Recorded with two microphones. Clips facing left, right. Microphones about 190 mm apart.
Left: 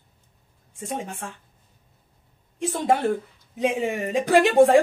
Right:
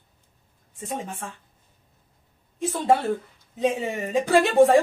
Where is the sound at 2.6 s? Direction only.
15° left (ahead or behind).